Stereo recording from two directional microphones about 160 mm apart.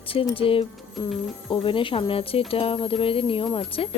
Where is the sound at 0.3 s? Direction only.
35° left (ahead or behind).